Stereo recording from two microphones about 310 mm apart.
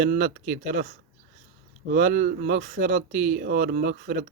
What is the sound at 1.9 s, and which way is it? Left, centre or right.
Speech, right.